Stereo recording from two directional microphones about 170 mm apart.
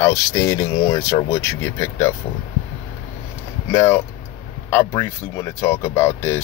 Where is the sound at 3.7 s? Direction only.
15° left (ahead or behind).